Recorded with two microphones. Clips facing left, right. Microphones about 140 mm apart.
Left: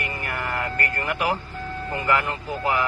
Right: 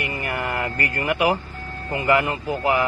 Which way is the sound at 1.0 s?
15° right (ahead or behind).